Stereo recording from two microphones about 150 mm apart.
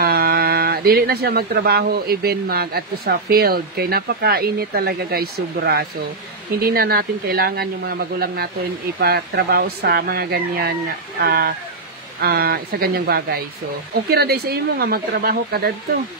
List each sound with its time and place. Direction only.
0.0 s speech: 90° right